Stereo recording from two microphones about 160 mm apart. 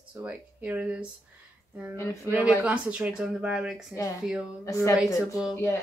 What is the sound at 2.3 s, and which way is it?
Speech, 10° right (ahead or behind).